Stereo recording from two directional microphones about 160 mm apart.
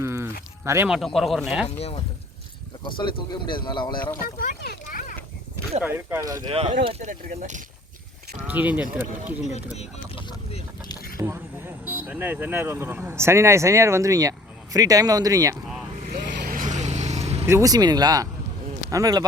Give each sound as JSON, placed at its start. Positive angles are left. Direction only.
{"t": 0.0, "sound": "sheep", "side_deg": -15}
{"t": 0.6, "sound": "speech", "side_deg": -15}
{"t": 0.9, "sound": "speech", "side_deg": 0}
{"t": 3.0, "sound": "speech", "side_deg": 30}
{"t": 4.2, "sound": "speech", "side_deg": 65}
{"t": 5.8, "sound": "speech", "side_deg": -15}
{"t": 6.5, "sound": "speech", "side_deg": -40}
{"t": 8.4, "sound": "speech", "side_deg": -10}
{"t": 10.2, "sound": "vehicle", "side_deg": 30}
{"t": 11.2, "sound": "speech", "side_deg": -15}
{"t": 16.0, "sound": "vehicle", "side_deg": -60}
{"t": 16.8, "sound": "vehicle", "side_deg": -45}
{"t": 17.4, "sound": "speech", "side_deg": -20}